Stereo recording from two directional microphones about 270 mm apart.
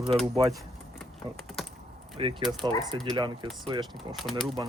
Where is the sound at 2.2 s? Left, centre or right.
Centre.